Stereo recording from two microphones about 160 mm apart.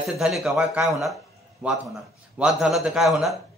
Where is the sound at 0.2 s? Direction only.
Centre (ahead or behind).